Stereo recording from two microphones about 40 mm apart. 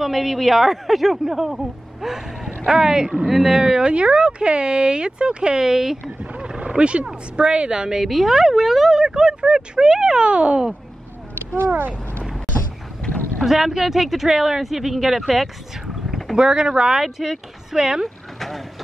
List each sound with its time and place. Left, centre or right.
0.0 s speech: centre
6.3 s speech: right
11.5 s speech: right
13.0 s boat: centre
13.4 s speech: centre
16.3 s speech: right
17.0 s speech: centre
17.7 s speech: centre
18.0 s vehicle: centre